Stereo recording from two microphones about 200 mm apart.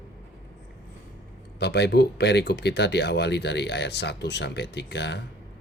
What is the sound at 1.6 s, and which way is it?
Speech, 55° left (ahead or behind).